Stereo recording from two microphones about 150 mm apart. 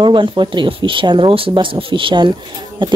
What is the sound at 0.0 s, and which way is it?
Speech, 30° right (ahead or behind).